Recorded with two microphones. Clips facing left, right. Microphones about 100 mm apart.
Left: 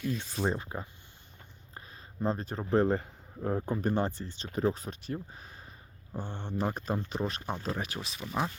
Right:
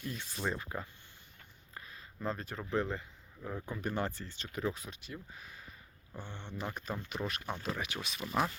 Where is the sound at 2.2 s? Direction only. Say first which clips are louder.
Left 6 dB; 25° left (ahead or behind).